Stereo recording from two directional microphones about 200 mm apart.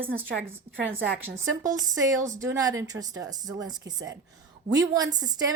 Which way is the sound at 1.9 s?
15° right (ahead or behind).